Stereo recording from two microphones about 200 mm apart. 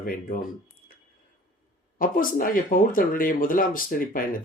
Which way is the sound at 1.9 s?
45° left (ahead or behind).